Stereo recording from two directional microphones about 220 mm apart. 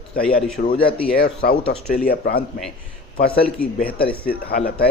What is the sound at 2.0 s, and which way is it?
A man's voice, 45° left (ahead or behind).